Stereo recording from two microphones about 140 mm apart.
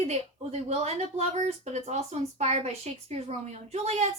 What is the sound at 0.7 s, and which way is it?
Speech, 50° right (ahead or behind).